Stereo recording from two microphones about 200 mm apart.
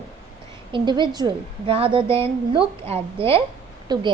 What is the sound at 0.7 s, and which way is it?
A woman's voice, 25° right (ahead or behind).